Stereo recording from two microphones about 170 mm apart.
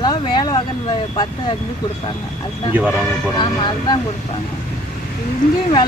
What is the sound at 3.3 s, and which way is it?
Speech, 25° left (ahead or behind).